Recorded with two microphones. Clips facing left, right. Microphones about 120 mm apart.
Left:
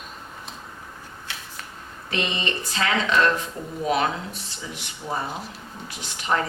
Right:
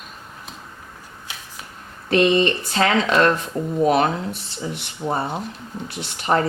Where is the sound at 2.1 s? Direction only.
50° right (ahead or behind).